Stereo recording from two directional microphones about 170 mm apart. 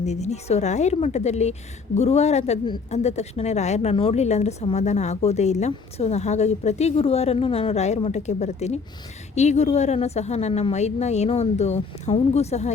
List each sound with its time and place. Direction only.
0.0 s a woman's voice: 40° left (ahead or behind)